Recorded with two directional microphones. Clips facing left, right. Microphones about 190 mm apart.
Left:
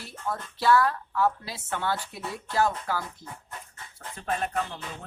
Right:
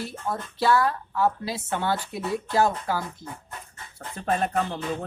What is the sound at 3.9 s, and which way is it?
Music, 40° right (ahead or behind).